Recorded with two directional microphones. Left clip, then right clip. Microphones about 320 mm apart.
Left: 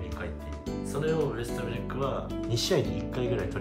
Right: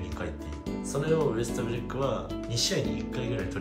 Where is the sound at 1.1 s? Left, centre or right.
Centre.